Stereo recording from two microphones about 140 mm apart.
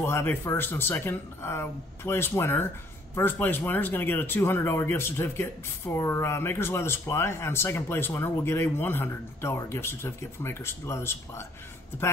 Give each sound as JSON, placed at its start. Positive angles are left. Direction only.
{"t": 0.0, "sound": "speech", "side_deg": 15}